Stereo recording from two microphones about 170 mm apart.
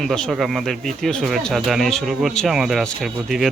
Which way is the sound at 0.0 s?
Centre (ahead or behind).